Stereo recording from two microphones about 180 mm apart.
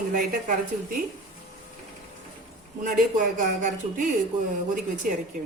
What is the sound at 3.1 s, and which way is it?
Speech, 45° right (ahead or behind).